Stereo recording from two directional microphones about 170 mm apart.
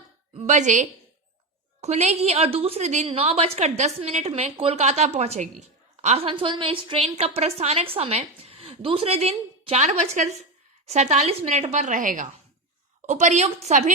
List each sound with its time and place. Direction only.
0.3 s a woman's voice: 45° right (ahead or behind)